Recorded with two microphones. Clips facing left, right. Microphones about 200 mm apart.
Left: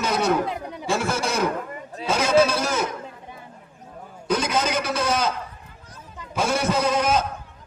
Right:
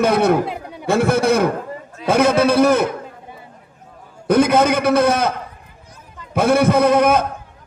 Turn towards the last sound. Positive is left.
turn(degrees=-60)  # may be behind; listen again after turning